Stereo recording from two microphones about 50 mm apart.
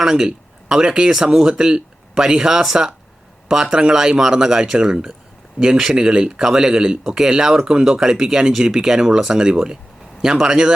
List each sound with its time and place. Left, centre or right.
0.0 s speech: centre